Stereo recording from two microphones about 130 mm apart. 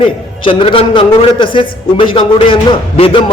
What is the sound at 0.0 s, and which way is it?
A man's voice, 45° left (ahead or behind).